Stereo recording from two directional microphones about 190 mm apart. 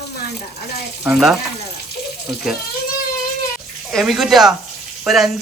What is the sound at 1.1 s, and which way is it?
Speech, centre (ahead or behind).